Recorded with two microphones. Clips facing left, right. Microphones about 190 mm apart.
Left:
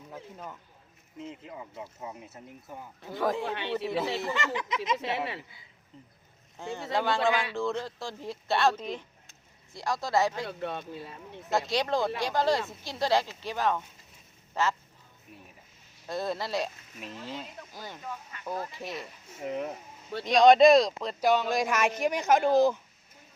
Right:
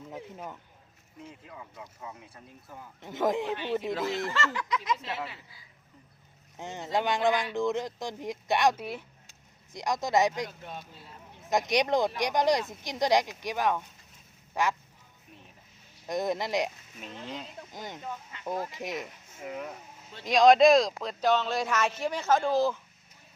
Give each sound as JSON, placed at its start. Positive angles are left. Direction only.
{"t": 0.1, "sound": "speech", "side_deg": -15}
{"t": 1.2, "sound": "speech", "side_deg": 20}
{"t": 3.0, "sound": "speech", "side_deg": -20}
{"t": 3.9, "sound": "speech", "side_deg": 15}
{"t": 4.9, "sound": "speech", "side_deg": 70}
{"t": 6.6, "sound": "speech", "side_deg": -20}
{"t": 10.6, "sound": "speech", "side_deg": 70}
{"t": 11.4, "sound": "speech", "side_deg": -15}
{"t": 16.0, "sound": "speech", "side_deg": -15}
{"t": 17.0, "sound": "speech", "side_deg": 0}
{"t": 17.7, "sound": "speech", "side_deg": -20}
{"t": 20.2, "sound": "a man's voice", "side_deg": 0}